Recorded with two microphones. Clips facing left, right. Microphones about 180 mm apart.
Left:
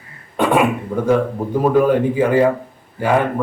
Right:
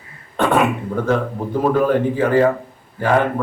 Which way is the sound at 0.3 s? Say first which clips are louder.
Left 1 dB; 10° left (ahead or behind).